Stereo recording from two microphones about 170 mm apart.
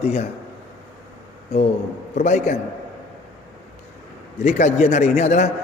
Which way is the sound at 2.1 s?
45° left (ahead or behind).